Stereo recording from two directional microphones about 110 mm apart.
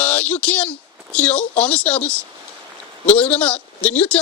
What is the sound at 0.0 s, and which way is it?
Speech, 10° left (ahead or behind).